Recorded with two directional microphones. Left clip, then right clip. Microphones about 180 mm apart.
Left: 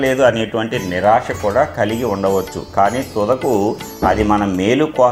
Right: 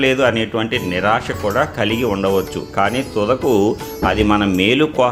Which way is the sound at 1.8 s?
40° right (ahead or behind).